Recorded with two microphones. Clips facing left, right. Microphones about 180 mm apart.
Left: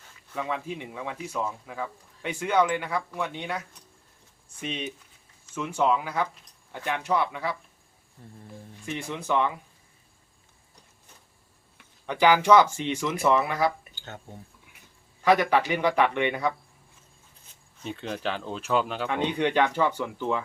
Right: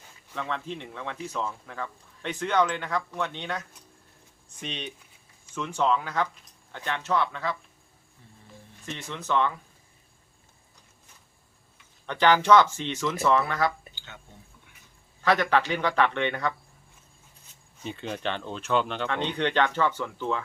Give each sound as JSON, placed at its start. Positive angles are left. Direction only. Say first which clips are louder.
{"t": 0.3, "sound": "speech", "louder": "left 2 dB", "side_deg": 10}
{"t": 8.2, "sound": "music", "louder": "left 8 dB", "side_deg": 50}
{"t": 8.9, "sound": "speech", "louder": "left 1 dB", "side_deg": 10}
{"t": 12.0, "sound": "speech", "louder": "left 1 dB", "side_deg": 10}
{"t": 13.9, "sound": "a sound", "louder": "left 6 dB", "side_deg": 45}
{"t": 15.2, "sound": "speech", "louder": "left 2 dB", "side_deg": 10}
{"t": 17.8, "sound": "speech", "louder": "left 1 dB", "side_deg": 0}